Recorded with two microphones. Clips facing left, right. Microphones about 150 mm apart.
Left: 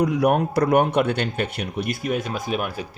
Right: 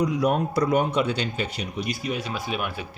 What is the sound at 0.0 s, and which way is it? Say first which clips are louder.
Speech: left 3 dB; 60° left (ahead or behind).